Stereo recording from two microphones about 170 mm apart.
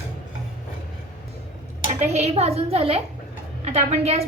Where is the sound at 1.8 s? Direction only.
40° right (ahead or behind).